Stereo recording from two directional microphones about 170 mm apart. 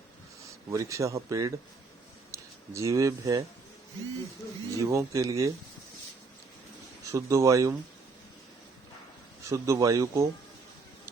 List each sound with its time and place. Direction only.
0.7 s a man's voice: 20° right (ahead or behind)
4.8 s a man's voice: 20° right (ahead or behind)
7.1 s a man's voice: 20° right (ahead or behind)
9.5 s speech: 20° right (ahead or behind)